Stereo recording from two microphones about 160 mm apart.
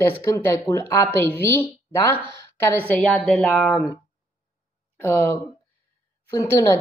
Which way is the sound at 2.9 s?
5° left (ahead or behind).